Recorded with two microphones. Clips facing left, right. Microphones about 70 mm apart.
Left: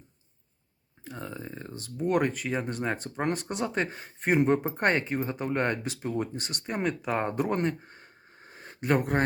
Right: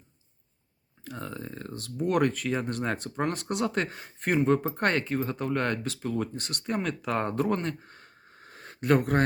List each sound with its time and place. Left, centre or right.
1.0 s speech: centre
4.4 s speech: left
6.3 s speech: centre; by 7.9 s left
8.4 s a sound: centre